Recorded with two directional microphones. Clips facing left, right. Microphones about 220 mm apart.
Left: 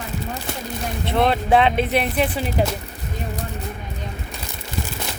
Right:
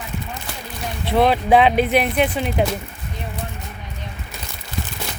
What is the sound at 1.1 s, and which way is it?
Speech, 5° right (ahead or behind).